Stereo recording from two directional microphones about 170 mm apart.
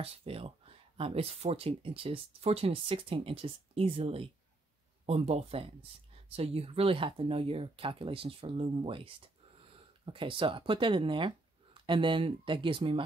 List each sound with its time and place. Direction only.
0.0 s speech: 35° right (ahead or behind)